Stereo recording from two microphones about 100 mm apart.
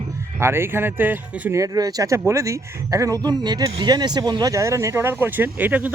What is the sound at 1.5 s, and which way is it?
Speech, 35° right (ahead or behind).